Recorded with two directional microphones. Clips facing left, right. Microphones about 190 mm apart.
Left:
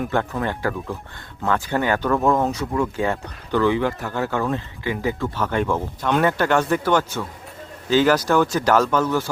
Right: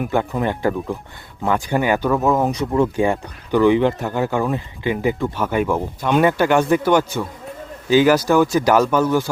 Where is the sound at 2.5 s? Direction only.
20° right (ahead or behind).